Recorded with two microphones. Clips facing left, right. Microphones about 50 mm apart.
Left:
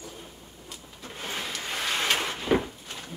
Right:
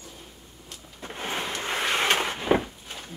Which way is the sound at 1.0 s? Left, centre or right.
Right.